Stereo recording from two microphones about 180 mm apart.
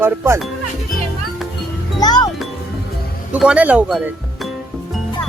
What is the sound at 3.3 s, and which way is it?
Speech, 5° right (ahead or behind).